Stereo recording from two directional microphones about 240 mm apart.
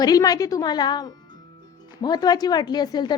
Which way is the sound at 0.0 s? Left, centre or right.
Centre.